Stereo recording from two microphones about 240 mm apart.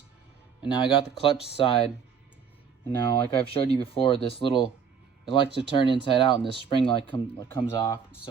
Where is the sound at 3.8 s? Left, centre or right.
Left.